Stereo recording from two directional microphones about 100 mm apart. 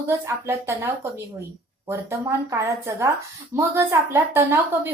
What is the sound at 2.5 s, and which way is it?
A woman's voice, 30° right (ahead or behind).